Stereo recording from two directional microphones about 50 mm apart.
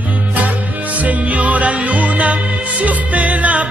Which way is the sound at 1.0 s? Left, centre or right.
Right.